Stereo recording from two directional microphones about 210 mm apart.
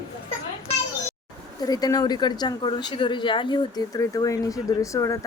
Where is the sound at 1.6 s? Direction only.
20° left (ahead or behind).